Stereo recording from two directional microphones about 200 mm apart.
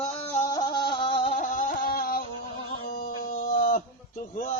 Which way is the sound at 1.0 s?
30° left (ahead or behind).